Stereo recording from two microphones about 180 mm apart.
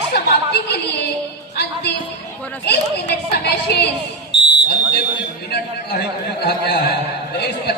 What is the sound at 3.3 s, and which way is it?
Speech, 65° left (ahead or behind).